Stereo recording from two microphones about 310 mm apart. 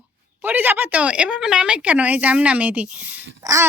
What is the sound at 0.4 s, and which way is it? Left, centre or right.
A woman's voice, centre.